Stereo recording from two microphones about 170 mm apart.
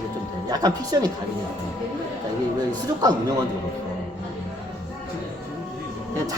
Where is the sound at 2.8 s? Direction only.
25° right (ahead or behind).